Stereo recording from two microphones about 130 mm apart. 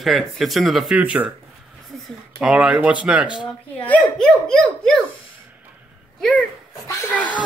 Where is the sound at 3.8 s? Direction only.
10° left (ahead or behind).